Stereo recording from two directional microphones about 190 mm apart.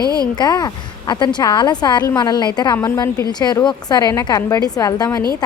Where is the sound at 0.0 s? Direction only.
20° right (ahead or behind).